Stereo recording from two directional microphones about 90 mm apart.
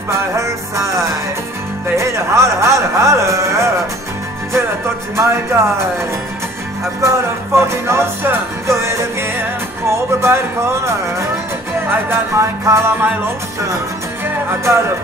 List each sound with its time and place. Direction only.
0.1 s music: 35° right (ahead or behind)
5.1 s speech: 30° right (ahead or behind)
7.0 s music: 35° right (ahead or behind)
14.2 s music: 30° right (ahead or behind)